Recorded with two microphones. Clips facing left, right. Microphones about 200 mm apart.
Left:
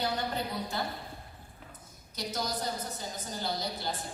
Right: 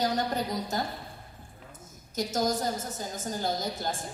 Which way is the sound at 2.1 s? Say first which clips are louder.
Right 7 dB; 45° right (ahead or behind).